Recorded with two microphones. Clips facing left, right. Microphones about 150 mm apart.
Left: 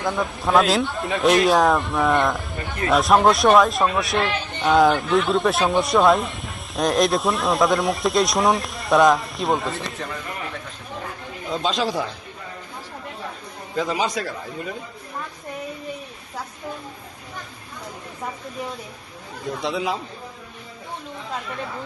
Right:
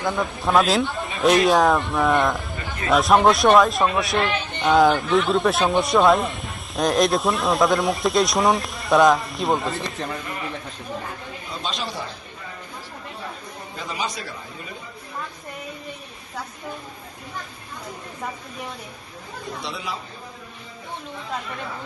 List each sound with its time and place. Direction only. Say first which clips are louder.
0.0 s a man's voice: even; centre (ahead or behind)
11.6 s a man's voice: left 7 dB; 90° left
13.7 s a man's voice: left 7 dB; 90° left